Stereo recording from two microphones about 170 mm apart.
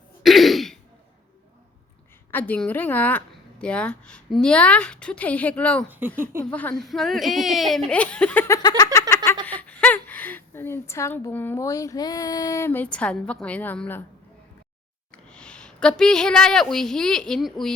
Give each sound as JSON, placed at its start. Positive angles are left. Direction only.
{"t": 0.2, "sound": "throat clearing", "side_deg": 0}
{"t": 2.3, "sound": "a woman's voice", "side_deg": 10}
{"t": 5.9, "sound": "speech", "side_deg": -10}
{"t": 6.4, "sound": "a woman's voice", "side_deg": 10}
{"t": 8.8, "sound": "a sound", "side_deg": 15}
{"t": 9.5, "sound": "a woman's voice", "side_deg": 10}
{"t": 15.1, "sound": "speech", "side_deg": 5}